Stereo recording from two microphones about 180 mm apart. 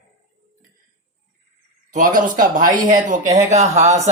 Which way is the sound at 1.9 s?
45° right (ahead or behind).